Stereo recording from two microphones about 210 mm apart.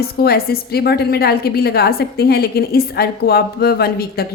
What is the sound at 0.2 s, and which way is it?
A woman's voice, 45° left (ahead or behind).